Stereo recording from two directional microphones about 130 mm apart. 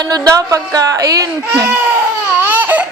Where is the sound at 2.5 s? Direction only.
15° right (ahead or behind).